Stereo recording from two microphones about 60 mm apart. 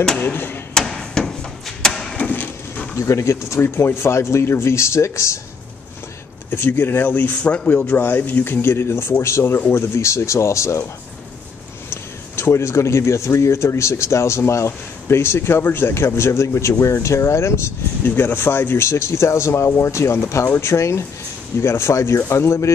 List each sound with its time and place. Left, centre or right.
0.2 s speech: left
0.7 s hammer: centre
1.8 s a sound: centre
2.1 s wood: left
3.0 s speech: left
6.5 s speech: left
7.4 s speech: left
7.8 s speech: left
11.9 s speech: left
18.1 s speech: left